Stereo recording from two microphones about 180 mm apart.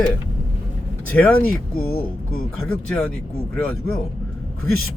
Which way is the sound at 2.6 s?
5° left (ahead or behind).